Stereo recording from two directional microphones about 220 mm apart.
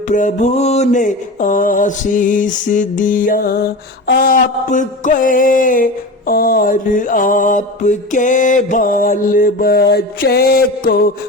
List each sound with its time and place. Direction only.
0.1 s mantra: 35° left (ahead or behind)